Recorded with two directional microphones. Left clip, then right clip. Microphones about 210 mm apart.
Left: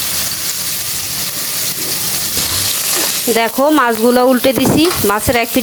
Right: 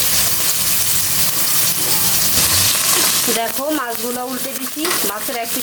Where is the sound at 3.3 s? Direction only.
35° left (ahead or behind).